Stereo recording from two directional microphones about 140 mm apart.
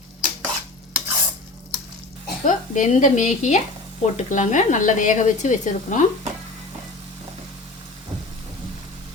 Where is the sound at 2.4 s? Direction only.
65° left (ahead or behind).